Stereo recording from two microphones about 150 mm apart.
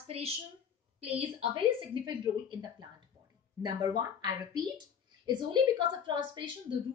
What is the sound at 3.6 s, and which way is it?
A woman's voice, 30° right (ahead or behind).